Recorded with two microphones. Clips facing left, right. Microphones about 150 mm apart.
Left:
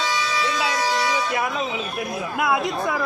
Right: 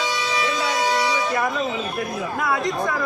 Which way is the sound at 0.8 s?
20° right (ahead or behind).